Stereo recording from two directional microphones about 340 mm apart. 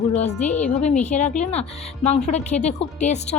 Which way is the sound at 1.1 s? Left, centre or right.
Left.